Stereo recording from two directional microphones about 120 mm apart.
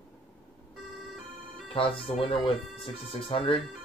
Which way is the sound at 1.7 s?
50° left (ahead or behind).